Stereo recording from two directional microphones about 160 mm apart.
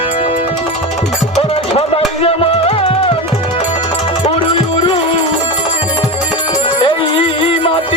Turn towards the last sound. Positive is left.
turn(degrees=35)  # may be behind; listen again after turning